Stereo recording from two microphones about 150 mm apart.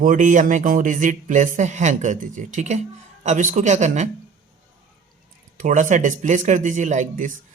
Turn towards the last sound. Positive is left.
turn(degrees=-60)  # may be behind; listen again after turning